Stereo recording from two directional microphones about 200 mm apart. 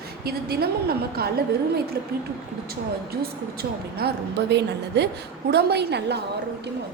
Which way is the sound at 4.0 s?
55° right (ahead or behind).